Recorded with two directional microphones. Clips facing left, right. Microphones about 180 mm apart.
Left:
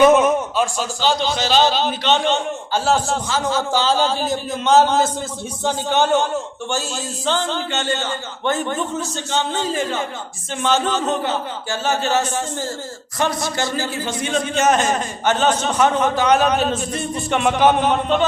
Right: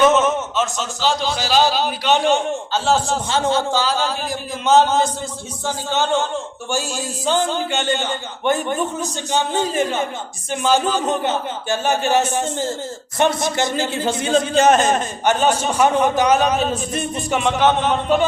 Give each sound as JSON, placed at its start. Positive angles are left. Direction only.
{"t": 0.0, "sound": "a sound", "side_deg": 10}
{"t": 1.0, "sound": "a man's voice", "side_deg": 0}
{"t": 2.7, "sound": "a man's voice", "side_deg": 0}
{"t": 3.2, "sound": "speech", "side_deg": -25}
{"t": 3.8, "sound": "a man's voice", "side_deg": 30}
{"t": 5.6, "sound": "a man's voice", "side_deg": 15}
{"t": 6.7, "sound": "a man's voice", "side_deg": -10}
{"t": 16.4, "sound": "a man's voice", "side_deg": 0}
{"t": 16.9, "sound": "speech", "side_deg": -20}
{"t": 17.2, "sound": "a man's voice", "side_deg": 0}
{"t": 17.6, "sound": "a man's voice", "side_deg": 10}